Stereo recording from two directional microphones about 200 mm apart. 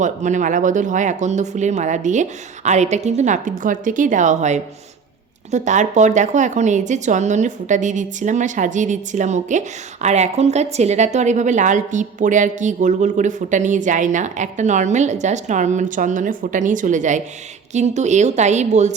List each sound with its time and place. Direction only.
0.0 s a woman's voice: 40° right (ahead or behind)